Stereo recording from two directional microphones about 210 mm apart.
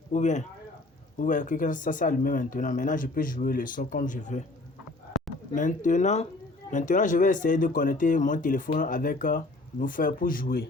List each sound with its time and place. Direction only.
0.1 s speech: 35° left (ahead or behind)
5.5 s speech: 35° left (ahead or behind)